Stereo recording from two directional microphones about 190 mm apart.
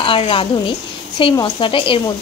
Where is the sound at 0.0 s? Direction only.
30° left (ahead or behind).